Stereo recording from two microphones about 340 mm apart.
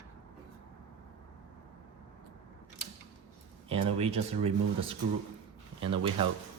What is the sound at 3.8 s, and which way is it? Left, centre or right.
Speech, centre.